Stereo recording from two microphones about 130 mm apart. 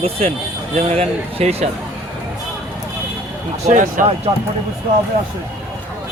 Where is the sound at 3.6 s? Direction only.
85° right.